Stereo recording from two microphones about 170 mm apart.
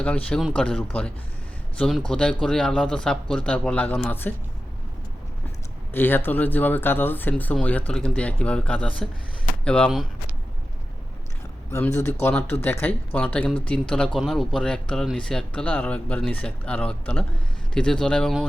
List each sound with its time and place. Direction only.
0.0 s speech: 5° left (ahead or behind)
5.9 s speech: 10° left (ahead or behind)
11.7 s speech: 15° left (ahead or behind)